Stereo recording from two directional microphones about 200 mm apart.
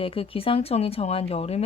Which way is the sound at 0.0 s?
30° left (ahead or behind).